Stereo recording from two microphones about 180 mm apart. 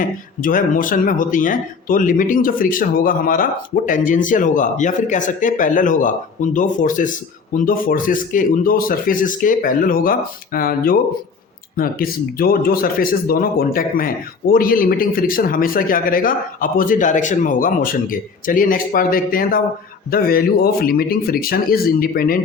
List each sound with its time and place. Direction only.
0.0 s speech: 50° left (ahead or behind)